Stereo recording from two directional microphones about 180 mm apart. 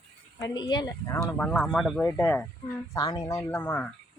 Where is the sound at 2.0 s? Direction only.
10° left (ahead or behind).